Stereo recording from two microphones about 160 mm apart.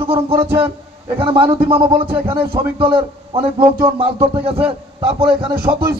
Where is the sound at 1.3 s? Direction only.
30° right (ahead or behind).